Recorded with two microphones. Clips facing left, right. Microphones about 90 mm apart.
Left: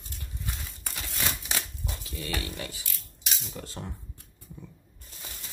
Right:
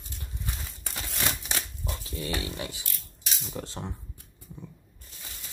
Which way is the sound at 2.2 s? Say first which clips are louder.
Right 2 dB; 25° right (ahead or behind).